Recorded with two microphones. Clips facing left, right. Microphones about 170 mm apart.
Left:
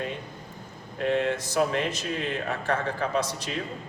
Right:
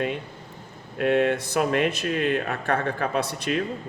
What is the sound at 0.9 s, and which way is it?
Speech, 60° right (ahead or behind).